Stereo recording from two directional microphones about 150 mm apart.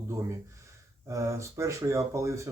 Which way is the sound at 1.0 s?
20° right (ahead or behind).